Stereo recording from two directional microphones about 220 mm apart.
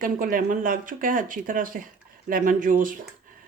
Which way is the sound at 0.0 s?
40° right (ahead or behind).